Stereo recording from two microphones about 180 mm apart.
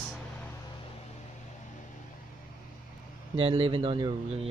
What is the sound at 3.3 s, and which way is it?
Speech, 30° right (ahead or behind).